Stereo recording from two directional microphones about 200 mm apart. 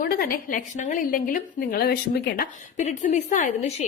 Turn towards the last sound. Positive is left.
turn(degrees=35)  # may be behind; listen again after turning